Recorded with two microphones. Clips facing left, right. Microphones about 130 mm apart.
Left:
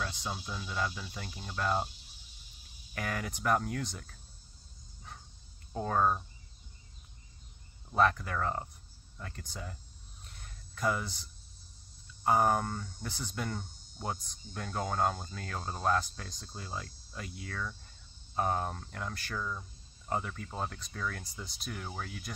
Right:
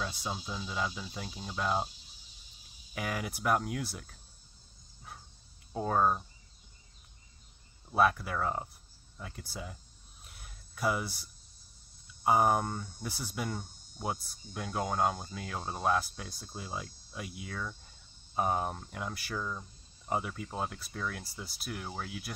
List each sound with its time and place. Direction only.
0.0 s speech: 10° right (ahead or behind)
2.9 s speech: 10° right (ahead or behind)
5.7 s speech: 10° right (ahead or behind)
7.9 s speech: 10° right (ahead or behind)
10.2 s a sound: 5° right (ahead or behind)
12.2 s speech: 10° right (ahead or behind)